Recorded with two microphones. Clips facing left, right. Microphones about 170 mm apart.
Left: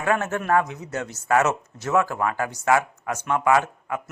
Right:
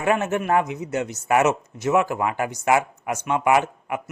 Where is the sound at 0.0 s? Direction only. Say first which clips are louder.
Right 2 dB; 15° right (ahead or behind).